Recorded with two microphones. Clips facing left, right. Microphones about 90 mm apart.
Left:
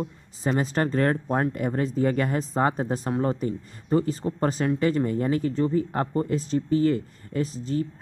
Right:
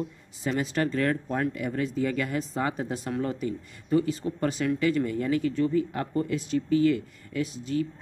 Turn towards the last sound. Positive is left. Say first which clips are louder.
# left 2 dB
turn(degrees=35)  # may be behind; listen again after turning